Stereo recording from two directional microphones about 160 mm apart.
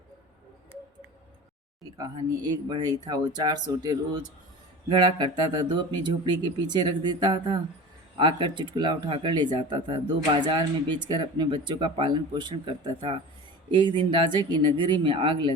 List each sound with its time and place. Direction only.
2.0 s speech: 25° right (ahead or behind)